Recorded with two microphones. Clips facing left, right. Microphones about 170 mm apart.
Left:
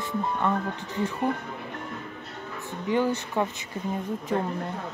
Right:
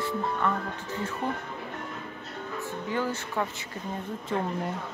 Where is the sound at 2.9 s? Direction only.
20° left (ahead or behind).